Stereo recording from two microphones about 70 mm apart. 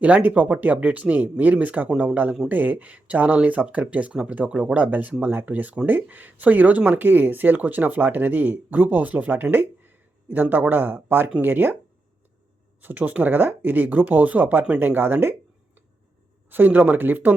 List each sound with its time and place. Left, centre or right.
0.0 s speech: right
12.8 s speech: right